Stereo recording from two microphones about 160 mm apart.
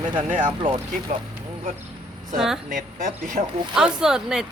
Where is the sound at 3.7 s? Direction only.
5° right (ahead or behind).